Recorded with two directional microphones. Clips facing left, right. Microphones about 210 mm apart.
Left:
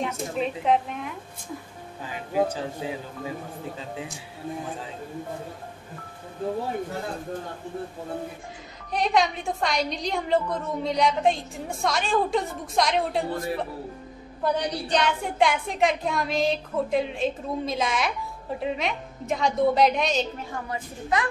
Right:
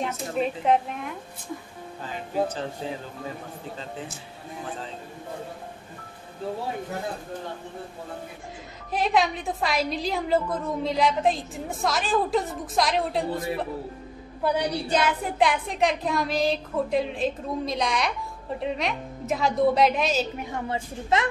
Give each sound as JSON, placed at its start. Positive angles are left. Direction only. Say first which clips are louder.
{"t": 0.0, "sound": "a woman's voice", "louder": "right 1 dB", "side_deg": 0}
{"t": 2.1, "sound": "speech", "louder": "left 2 dB", "side_deg": 10}
{"t": 8.9, "sound": "a woman's voice", "louder": "even", "side_deg": 0}
{"t": 20.5, "sound": "a woman's voice", "louder": "right 5 dB", "side_deg": -25}